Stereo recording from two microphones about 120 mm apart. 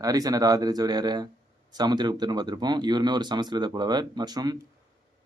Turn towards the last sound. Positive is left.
turn(degrees=-35)  # may be behind; listen again after turning